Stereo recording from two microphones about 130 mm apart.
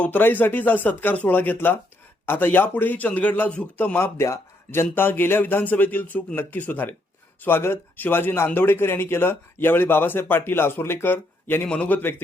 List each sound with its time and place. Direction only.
0.0 s a man's voice: 15° left (ahead or behind)